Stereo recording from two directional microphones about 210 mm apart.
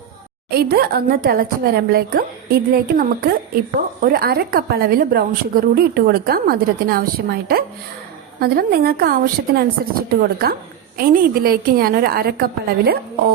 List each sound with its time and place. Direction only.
0.5 s a woman's voice: 45° right (ahead or behind)